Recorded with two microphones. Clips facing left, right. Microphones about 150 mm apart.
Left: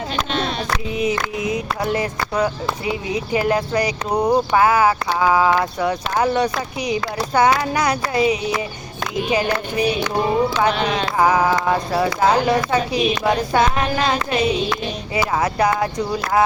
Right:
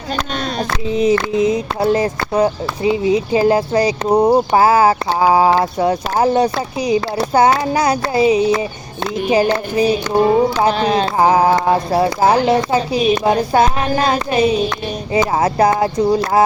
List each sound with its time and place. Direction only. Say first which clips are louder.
0.9 s a woman's voice: right 9 dB; 30° right (ahead or behind)
15.4 s a woman's voice: right 4 dB; 30° right (ahead or behind)